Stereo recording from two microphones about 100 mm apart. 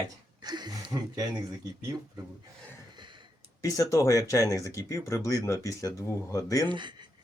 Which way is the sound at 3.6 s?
35° left (ahead or behind).